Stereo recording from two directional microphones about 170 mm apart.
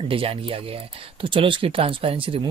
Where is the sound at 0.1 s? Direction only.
35° right (ahead or behind).